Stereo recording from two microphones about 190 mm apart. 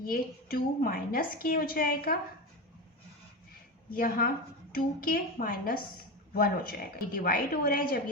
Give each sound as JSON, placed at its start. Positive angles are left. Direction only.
{"t": 0.0, "sound": "a woman's voice", "side_deg": 50}
{"t": 3.9, "sound": "a woman's voice", "side_deg": 50}